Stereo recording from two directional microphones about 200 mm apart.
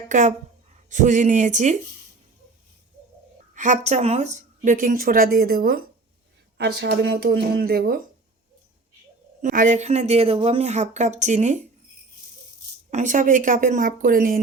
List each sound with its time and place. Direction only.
0.1 s a woman's voice: 40° right (ahead or behind)
3.5 s speech: 40° right (ahead or behind)
9.4 s speech: 40° right (ahead or behind)
12.9 s speech: 40° right (ahead or behind)